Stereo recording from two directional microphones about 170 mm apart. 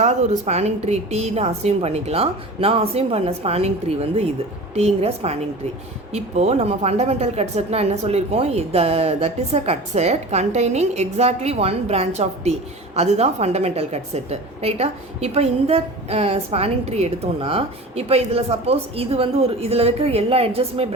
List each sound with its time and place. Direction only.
0.0 s a woman's voice: 40° right (ahead or behind)